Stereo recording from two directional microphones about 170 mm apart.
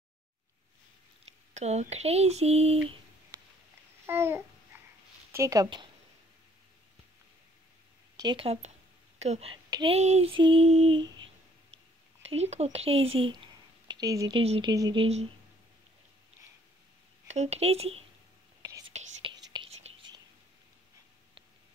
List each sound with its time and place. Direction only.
1.5 s speech: 40° right (ahead or behind)
4.0 s babbling: 15° right (ahead or behind)
5.3 s speech: 20° right (ahead or behind)
8.2 s speech: 30° right (ahead or behind)
12.3 s speech: 40° right (ahead or behind); by 14.4 s 20° right (ahead or behind)
14.4 s speech: 35° right (ahead or behind)
14.7 s speech: 25° right (ahead or behind)
17.3 s speech: 40° right (ahead or behind)
18.9 s whispering: 30° right (ahead or behind)
19.7 s whispering: 40° right (ahead or behind)